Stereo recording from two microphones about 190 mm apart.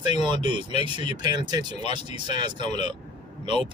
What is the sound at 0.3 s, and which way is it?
Speech, 25° right (ahead or behind).